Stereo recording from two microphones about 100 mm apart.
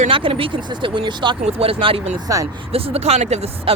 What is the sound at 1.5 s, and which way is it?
Speech, 70° right (ahead or behind).